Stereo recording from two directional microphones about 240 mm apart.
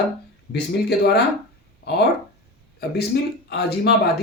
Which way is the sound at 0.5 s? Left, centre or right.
Left.